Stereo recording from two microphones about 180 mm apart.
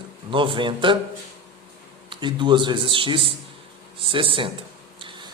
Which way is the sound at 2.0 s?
25° right (ahead or behind).